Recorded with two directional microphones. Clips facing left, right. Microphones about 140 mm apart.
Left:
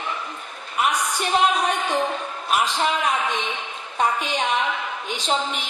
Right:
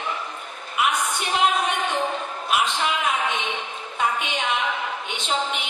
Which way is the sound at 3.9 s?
40° left (ahead or behind).